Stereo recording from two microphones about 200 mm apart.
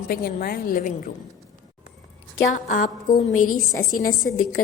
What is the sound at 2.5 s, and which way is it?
Speech, 40° left (ahead or behind).